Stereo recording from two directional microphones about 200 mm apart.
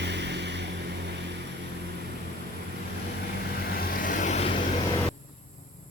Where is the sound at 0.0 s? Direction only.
60° right (ahead or behind).